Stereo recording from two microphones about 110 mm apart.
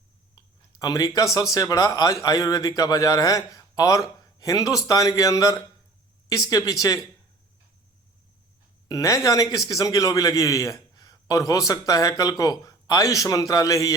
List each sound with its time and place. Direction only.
0.8 s a man's voice: 35° left (ahead or behind)
8.9 s a man's voice: 30° left (ahead or behind)